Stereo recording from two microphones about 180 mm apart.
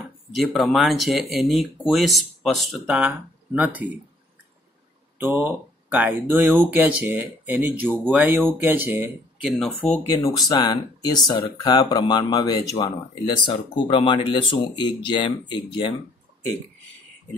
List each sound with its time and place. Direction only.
0.3 s speech: centre (ahead or behind)
5.2 s speech: 10° right (ahead or behind)
9.6 s speech: 10° left (ahead or behind)
10.1 s speech: 20° left (ahead or behind)